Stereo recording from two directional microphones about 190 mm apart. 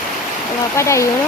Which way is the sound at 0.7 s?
15° left (ahead or behind).